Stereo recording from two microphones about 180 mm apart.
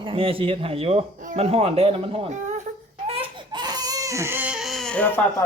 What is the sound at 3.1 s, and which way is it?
Baby cry, 30° right (ahead or behind).